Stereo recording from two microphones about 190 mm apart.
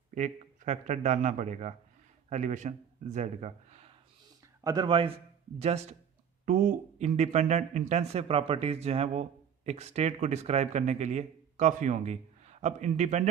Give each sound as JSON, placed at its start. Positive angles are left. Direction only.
{"t": 0.1, "sound": "speech", "side_deg": -40}
{"t": 4.6, "sound": "speech", "side_deg": -20}